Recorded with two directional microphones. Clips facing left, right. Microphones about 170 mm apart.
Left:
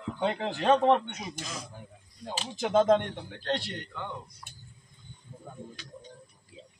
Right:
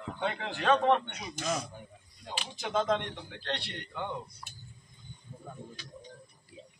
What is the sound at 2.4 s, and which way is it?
Speech, 45° left (ahead or behind).